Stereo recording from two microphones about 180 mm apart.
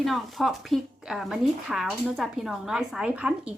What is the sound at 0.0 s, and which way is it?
Speech, centre (ahead or behind).